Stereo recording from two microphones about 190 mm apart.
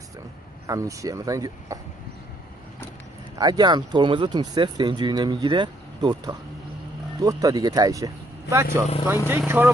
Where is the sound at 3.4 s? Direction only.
20° right (ahead or behind).